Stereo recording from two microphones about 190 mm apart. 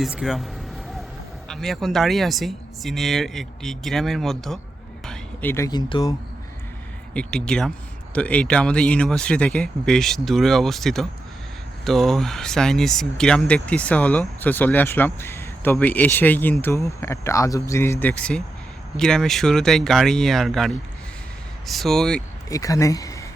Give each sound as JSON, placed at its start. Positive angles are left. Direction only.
{"t": 0.0, "sound": "speech", "side_deg": 0}
{"t": 1.5, "sound": "speech", "side_deg": 0}
{"t": 7.1, "sound": "speech", "side_deg": 5}
{"t": 22.4, "sound": "speech", "side_deg": 15}